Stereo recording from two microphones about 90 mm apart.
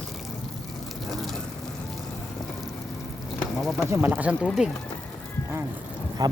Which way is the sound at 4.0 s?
15° right (ahead or behind).